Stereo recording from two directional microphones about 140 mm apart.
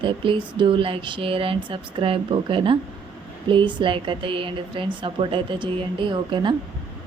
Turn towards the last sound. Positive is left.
turn(degrees=-35)  # may be behind; listen again after turning